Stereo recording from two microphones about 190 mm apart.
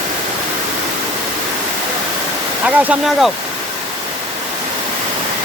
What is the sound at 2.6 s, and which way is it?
Speech, 5° right (ahead or behind).